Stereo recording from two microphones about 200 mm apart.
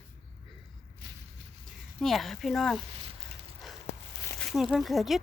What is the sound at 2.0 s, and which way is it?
Speech, centre (ahead or behind).